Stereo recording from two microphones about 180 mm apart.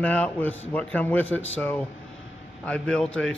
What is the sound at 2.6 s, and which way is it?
Speech, 5° left (ahead or behind).